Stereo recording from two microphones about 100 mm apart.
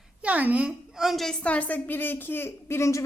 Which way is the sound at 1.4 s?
15° left (ahead or behind).